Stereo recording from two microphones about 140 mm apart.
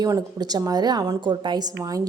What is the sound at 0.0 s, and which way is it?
Speech, 25° right (ahead or behind).